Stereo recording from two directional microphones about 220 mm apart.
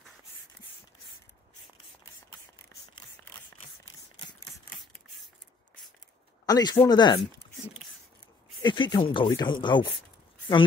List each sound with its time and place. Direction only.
6.4 s speech: 20° left (ahead or behind)
8.6 s speech: 20° left (ahead or behind)